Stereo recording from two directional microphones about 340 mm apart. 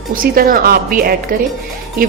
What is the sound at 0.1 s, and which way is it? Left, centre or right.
A woman's voice, right.